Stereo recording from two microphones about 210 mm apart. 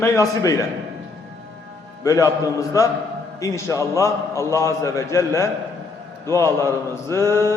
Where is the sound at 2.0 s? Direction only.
15° left (ahead or behind).